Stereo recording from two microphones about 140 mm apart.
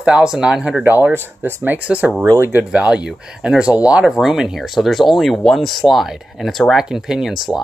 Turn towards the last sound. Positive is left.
turn(degrees=0)  # may be behind; listen again after turning